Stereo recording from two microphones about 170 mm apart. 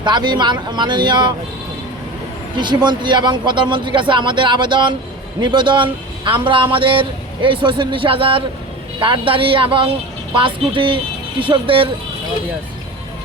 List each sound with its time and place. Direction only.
0.0 s a man's voice: 25° right (ahead or behind)
2.6 s a man's voice: 25° right (ahead or behind)